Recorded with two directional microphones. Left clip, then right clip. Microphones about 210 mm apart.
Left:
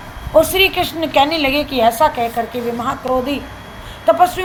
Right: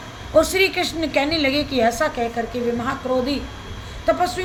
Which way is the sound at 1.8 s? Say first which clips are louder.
Left 6 dB; 30° left (ahead or behind).